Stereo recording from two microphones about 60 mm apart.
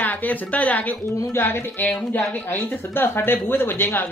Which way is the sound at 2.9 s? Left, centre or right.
Left.